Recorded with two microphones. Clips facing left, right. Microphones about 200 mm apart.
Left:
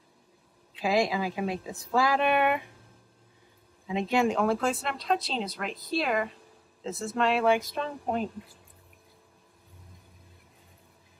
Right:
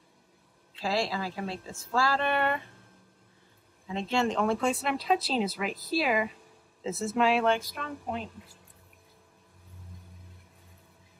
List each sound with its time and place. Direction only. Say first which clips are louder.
0.7 s a woman's voice: left 4 dB; 15° left (ahead or behind)
3.8 s speech: left 3 dB; 15° left (ahead or behind); by 7.5 s centre (ahead or behind)